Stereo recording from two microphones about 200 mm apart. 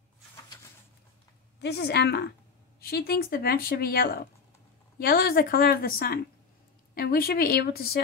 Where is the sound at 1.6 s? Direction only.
55° left (ahead or behind).